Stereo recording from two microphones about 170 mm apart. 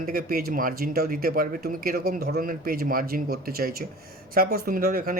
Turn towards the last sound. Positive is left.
turn(degrees=-60)  # may be behind; listen again after turning